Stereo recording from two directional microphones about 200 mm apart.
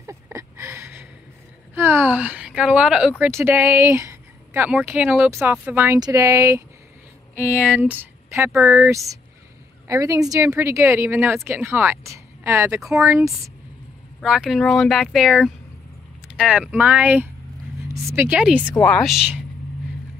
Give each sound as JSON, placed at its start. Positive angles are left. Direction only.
{"t": 0.0, "sound": "a sound", "side_deg": -15}
{"t": 1.8, "sound": "a woman's voice", "side_deg": -10}
{"t": 7.7, "sound": "a woman's voice", "side_deg": -10}